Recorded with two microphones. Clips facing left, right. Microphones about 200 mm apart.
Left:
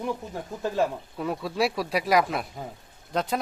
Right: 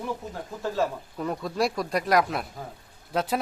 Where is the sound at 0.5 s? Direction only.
15° left (ahead or behind).